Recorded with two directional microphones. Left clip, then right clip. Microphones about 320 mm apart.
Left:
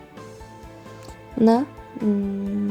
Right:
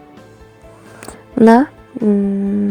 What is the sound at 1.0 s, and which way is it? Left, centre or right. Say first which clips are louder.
Music: right 9 dB; right.